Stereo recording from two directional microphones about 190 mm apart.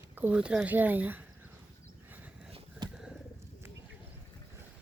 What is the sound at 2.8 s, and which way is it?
Bird, 20° right (ahead or behind).